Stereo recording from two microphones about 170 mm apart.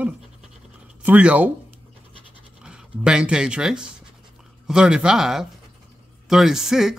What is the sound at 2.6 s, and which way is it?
Speech, 5° right (ahead or behind).